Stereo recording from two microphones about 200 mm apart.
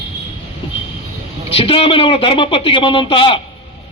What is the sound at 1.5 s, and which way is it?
A man's voice, 25° left (ahead or behind).